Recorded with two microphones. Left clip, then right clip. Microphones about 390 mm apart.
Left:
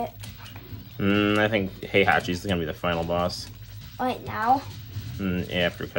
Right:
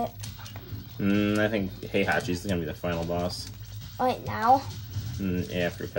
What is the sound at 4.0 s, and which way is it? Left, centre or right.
Speech, right.